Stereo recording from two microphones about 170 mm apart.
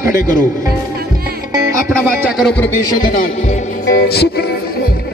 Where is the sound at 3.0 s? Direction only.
50° left (ahead or behind).